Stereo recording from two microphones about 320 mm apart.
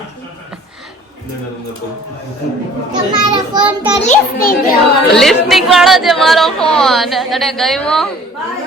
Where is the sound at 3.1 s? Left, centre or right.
Centre.